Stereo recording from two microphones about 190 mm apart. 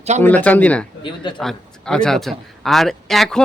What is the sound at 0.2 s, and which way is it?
Speech, 10° left (ahead or behind).